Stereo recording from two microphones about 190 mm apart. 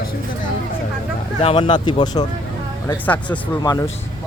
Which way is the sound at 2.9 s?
10° left (ahead or behind).